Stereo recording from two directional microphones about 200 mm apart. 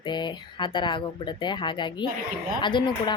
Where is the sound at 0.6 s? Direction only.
25° left (ahead or behind).